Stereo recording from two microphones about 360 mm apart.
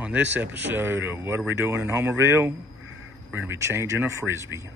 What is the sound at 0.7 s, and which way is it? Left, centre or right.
Speech, centre.